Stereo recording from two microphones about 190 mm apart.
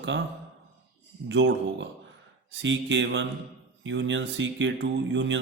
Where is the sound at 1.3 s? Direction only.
70° right (ahead or behind).